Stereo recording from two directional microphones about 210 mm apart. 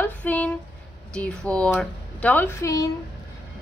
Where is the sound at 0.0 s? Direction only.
5° left (ahead or behind).